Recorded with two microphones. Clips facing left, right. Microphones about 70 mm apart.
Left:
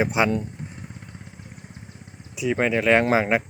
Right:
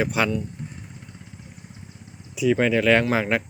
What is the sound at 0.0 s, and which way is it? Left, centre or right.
Speech, centre.